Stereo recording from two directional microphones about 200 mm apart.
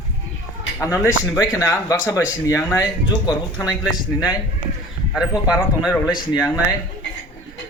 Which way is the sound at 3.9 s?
20° left (ahead or behind).